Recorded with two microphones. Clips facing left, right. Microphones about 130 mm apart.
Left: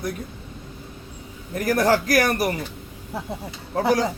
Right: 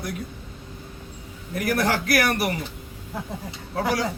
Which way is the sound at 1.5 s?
40° left (ahead or behind).